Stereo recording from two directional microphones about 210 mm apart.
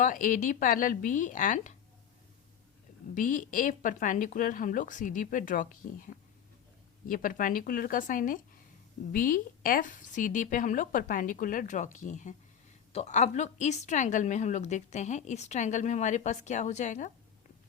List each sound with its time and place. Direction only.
0.0 s a woman's voice: 40° left (ahead or behind)
3.2 s a woman's voice: 40° left (ahead or behind)
7.1 s a woman's voice: 40° left (ahead or behind)